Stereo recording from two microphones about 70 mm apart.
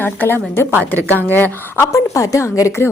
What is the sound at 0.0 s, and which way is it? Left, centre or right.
Speech, left.